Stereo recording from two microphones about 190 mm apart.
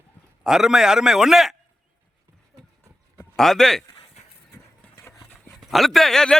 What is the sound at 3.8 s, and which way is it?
Dog, 20° left (ahead or behind).